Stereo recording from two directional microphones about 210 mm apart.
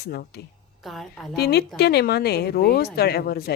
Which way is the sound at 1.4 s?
50° left (ahead or behind).